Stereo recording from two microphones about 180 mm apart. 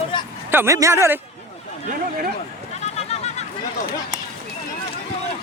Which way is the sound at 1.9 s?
50° right (ahead or behind).